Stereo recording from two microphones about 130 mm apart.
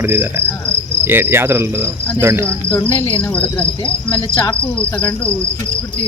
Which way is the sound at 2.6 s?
10° left (ahead or behind).